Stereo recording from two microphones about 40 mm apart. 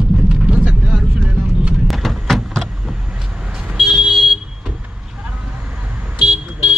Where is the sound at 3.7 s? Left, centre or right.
Centre.